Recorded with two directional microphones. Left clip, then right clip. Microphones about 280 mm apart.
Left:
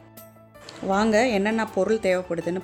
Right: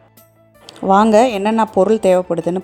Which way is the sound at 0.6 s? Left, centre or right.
Right.